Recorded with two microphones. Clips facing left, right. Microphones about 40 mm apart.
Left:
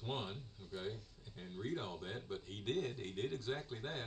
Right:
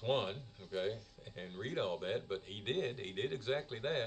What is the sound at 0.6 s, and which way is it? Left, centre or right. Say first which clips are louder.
A man's voice: right 7 dB; right.